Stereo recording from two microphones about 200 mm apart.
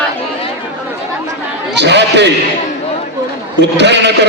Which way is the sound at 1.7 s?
60° right (ahead or behind).